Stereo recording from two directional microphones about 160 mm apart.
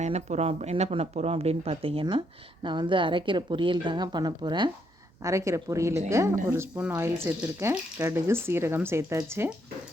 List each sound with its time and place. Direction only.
0.0 s a woman's voice: 45° right (ahead or behind); by 9.5 s 15° right (ahead or behind)